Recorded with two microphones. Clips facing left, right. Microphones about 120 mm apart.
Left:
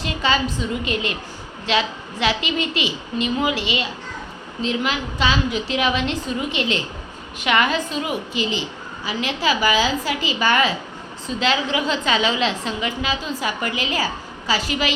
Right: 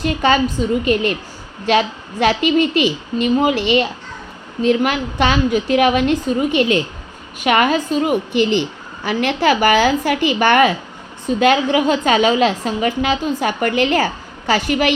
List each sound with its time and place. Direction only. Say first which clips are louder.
0.0 s a woman's voice: right 6 dB; 50° right (ahead or behind)